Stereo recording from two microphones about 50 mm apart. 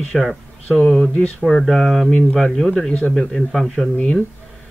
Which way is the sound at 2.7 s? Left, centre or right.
Centre.